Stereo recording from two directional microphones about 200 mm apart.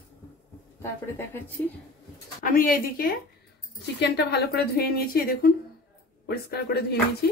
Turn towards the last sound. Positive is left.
turn(degrees=55)  # may be behind; listen again after turning